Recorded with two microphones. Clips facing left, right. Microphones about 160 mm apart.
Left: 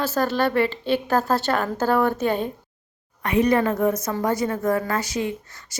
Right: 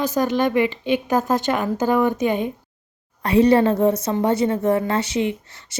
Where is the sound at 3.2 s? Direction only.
30° right (ahead or behind).